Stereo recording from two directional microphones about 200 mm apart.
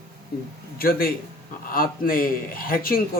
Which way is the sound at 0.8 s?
45° left (ahead or behind).